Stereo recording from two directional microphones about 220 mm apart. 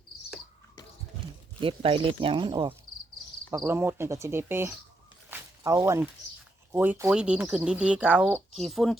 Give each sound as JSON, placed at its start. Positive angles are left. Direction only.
{"t": 1.6, "sound": "speech", "side_deg": -25}
{"t": 3.6, "sound": "cricket", "side_deg": -10}
{"t": 5.3, "sound": "a sound", "side_deg": -15}
{"t": 6.7, "sound": "speech", "side_deg": -10}